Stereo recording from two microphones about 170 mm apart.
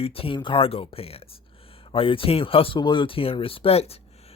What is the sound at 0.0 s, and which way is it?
Speech, 35° left (ahead or behind).